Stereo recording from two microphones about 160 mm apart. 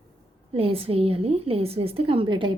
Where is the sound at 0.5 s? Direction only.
35° right (ahead or behind).